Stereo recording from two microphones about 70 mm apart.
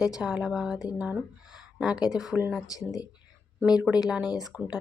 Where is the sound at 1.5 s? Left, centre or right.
Centre.